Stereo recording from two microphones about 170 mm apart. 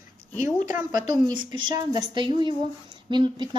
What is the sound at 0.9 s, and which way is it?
A woman's voice, 25° right (ahead or behind).